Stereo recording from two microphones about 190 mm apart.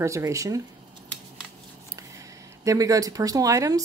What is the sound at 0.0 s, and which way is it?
Speech, 15° right (ahead or behind).